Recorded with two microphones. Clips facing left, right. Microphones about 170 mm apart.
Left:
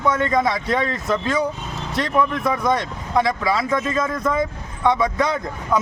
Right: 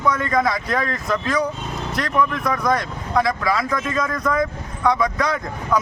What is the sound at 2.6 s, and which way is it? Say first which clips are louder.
Speech: even; centre (ahead or behind).